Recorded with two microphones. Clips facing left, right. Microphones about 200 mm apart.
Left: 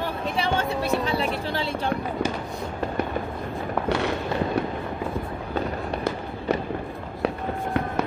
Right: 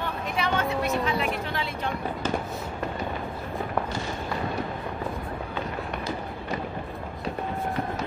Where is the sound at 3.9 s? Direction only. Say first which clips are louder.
Left 8 dB; 65° left (ahead or behind).